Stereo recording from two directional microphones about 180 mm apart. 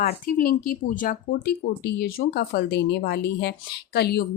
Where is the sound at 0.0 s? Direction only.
55° left (ahead or behind).